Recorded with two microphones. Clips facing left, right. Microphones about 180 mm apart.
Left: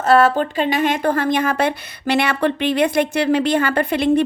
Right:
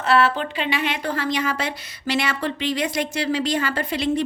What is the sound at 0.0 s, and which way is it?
Speech, 40° left (ahead or behind).